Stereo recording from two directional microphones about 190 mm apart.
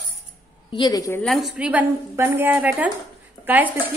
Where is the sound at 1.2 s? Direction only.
Centre (ahead or behind).